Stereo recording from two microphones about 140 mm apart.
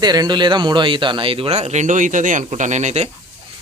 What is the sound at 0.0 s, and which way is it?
Speech, 30° right (ahead or behind).